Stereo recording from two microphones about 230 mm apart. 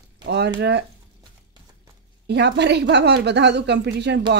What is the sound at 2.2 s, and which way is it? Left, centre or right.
Speech, right.